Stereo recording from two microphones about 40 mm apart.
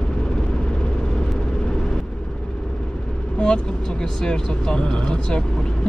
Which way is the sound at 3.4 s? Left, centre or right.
Left.